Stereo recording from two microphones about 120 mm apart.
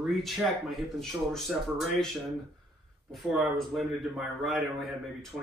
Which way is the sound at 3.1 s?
Centre (ahead or behind).